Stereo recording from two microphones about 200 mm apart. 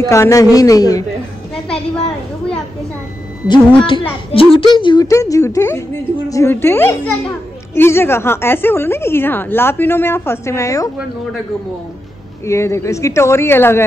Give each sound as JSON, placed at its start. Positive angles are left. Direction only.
{"t": 0.1, "sound": "a woman's voice", "side_deg": 15}
{"t": 3.4, "sound": "a woman's voice", "side_deg": 25}
{"t": 12.4, "sound": "a woman's voice", "side_deg": 15}